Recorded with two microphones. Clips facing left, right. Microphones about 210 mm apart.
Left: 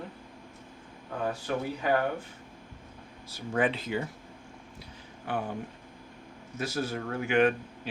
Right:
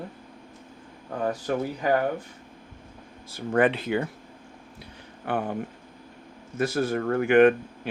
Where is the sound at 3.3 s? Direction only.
60° right (ahead or behind).